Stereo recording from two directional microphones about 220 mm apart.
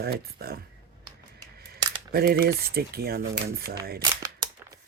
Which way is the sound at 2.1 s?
45° right (ahead or behind).